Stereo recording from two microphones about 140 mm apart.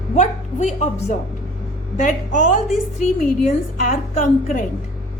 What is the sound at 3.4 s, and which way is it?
A woman's voice, 75° left (ahead or behind).